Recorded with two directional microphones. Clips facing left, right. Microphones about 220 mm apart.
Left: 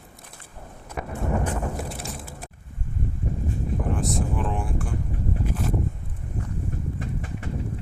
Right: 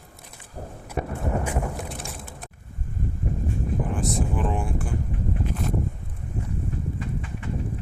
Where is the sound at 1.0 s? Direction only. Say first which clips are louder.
Right 4 dB; 35° right (ahead or behind).